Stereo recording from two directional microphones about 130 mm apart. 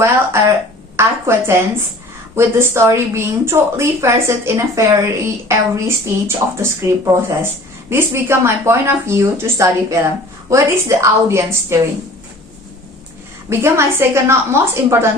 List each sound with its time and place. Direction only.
0.0 s speech: 20° right (ahead or behind)
13.5 s speech: 20° right (ahead or behind)